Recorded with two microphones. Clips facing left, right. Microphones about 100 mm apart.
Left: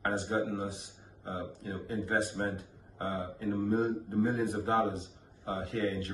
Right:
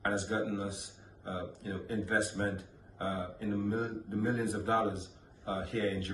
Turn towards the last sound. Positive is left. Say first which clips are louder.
# left 1 dB
turn(degrees=30)  # may be behind; listen again after turning